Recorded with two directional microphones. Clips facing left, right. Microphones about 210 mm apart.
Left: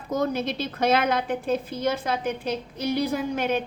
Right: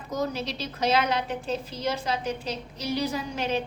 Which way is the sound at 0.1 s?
55° left (ahead or behind).